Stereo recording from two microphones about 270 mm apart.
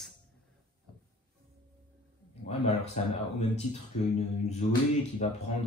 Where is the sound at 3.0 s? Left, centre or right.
Left.